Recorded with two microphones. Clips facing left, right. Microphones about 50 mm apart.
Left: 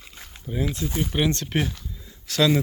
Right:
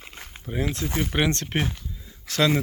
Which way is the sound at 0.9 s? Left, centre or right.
Right.